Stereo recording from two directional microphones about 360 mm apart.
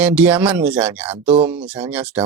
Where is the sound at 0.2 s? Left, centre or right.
Centre.